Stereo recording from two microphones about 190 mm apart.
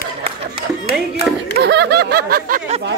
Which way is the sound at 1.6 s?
60° right (ahead or behind).